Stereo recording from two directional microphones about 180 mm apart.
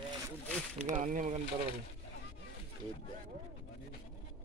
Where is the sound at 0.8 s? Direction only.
40° right (ahead or behind).